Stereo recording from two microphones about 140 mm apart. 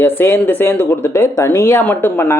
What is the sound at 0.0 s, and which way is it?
Speech, 15° left (ahead or behind).